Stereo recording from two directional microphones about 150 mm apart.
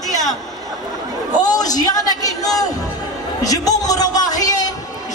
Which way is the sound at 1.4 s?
25° left (ahead or behind).